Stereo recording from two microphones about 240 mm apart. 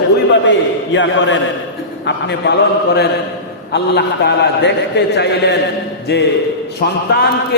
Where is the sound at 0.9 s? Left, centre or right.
Left.